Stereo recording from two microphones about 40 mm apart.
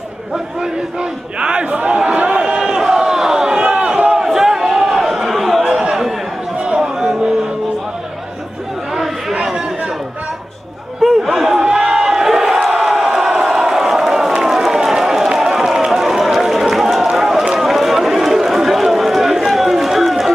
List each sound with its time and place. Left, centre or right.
0.6 s a man's voice: right
2.1 s a sound: right
4.3 s chatter: centre
5.6 s a sound: centre
9.3 s chatter: right
11.0 s chatter: centre
11.5 s crowd: centre
15.2 s run: centre